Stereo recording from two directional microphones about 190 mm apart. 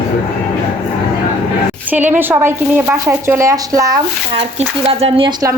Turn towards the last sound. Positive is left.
turn(degrees=-25)  # may be behind; listen again after turning